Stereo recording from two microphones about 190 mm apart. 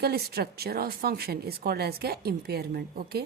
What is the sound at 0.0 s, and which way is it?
A woman's voice, 55° right (ahead or behind).